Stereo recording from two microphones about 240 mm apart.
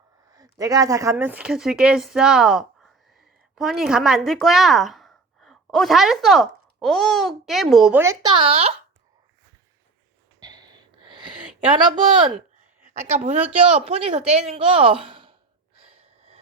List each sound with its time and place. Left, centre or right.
0.3 s speech: centre
10.4 s gasp: centre
11.8 s a woman's voice: centre
15.8 s gasp: right